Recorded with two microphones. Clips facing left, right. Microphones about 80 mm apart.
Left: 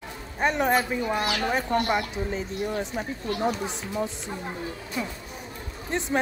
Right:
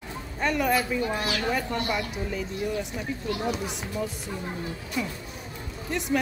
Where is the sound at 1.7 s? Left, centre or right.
Left.